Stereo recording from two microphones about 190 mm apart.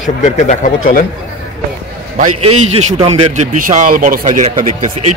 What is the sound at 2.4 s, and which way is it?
A man's voice, 35° right (ahead or behind).